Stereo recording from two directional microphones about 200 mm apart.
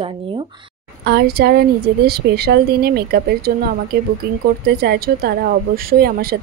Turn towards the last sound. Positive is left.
turn(degrees=-50)  # may be behind; listen again after turning